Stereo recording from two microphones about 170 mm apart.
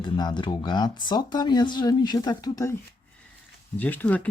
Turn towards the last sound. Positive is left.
turn(degrees=10)  # may be behind; listen again after turning